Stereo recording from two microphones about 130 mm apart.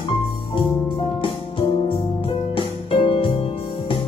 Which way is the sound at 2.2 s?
45° left (ahead or behind).